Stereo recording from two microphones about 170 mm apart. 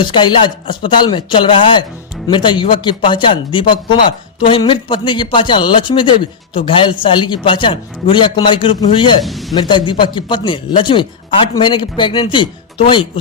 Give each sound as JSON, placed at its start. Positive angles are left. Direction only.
{"t": 0.0, "sound": "speech", "side_deg": 25}
{"t": 9.2, "sound": "a man's voice", "side_deg": 0}
{"t": 9.6, "sound": "speech", "side_deg": 25}